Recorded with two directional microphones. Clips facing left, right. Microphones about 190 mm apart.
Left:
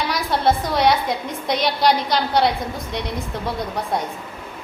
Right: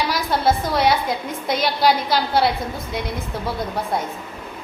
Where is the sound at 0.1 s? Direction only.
Centre (ahead or behind).